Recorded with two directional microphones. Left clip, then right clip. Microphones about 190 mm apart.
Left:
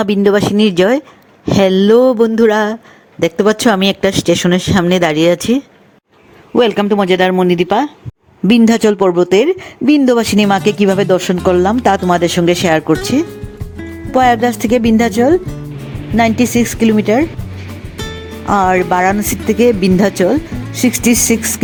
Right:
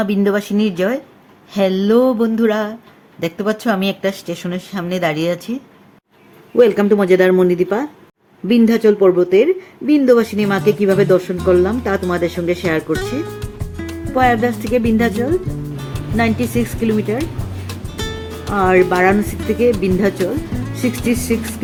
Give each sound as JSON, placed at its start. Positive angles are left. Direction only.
{"t": 0.0, "sound": "speech", "side_deg": 45}
{"t": 13.3, "sound": "music", "side_deg": 0}
{"t": 14.2, "sound": "speech", "side_deg": 45}
{"t": 17.9, "sound": "music", "side_deg": 0}
{"t": 18.5, "sound": "speech", "side_deg": 45}
{"t": 20.5, "sound": "music", "side_deg": 0}
{"t": 20.8, "sound": "speech", "side_deg": 45}